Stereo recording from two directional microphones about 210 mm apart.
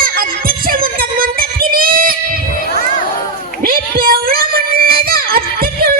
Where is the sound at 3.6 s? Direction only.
45° right (ahead or behind).